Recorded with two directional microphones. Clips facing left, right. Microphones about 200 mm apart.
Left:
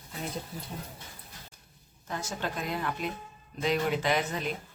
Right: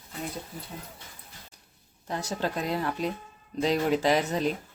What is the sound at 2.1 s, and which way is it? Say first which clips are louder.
Speech: right 4 dB; 35° right (ahead or behind).